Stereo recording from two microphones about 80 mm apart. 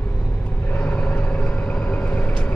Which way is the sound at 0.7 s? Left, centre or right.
Centre.